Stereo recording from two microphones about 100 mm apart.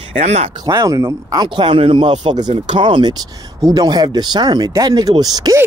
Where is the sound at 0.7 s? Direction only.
30° right (ahead or behind).